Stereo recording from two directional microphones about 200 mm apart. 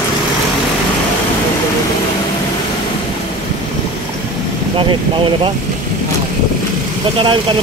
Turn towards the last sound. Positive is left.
turn(degrees=-25)  # may be behind; listen again after turning